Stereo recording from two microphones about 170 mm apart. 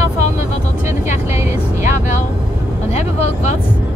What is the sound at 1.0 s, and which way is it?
Vehicle, 45° left (ahead or behind).